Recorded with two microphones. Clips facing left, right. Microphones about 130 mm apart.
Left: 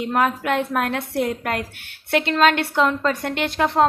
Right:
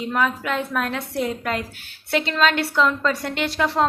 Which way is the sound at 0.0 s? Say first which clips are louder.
Left 2 dB; 50° left (ahead or behind).